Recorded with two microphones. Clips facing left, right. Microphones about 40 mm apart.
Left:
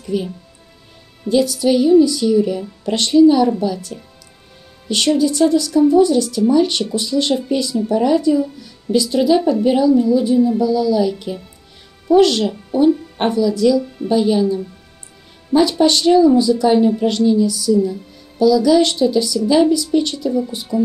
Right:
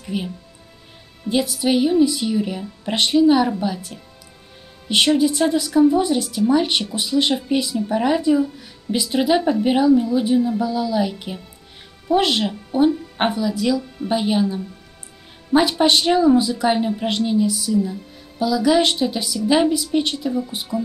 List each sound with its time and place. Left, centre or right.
0.0 s speech: right
1.3 s a woman's voice: right
15.8 s a woman's voice: right
20.7 s speech: centre